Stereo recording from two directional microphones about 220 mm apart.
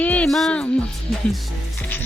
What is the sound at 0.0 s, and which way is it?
Music, 5° left (ahead or behind).